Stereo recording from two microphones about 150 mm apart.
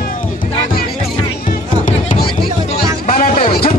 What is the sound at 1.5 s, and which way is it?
Music, 60° left (ahead or behind).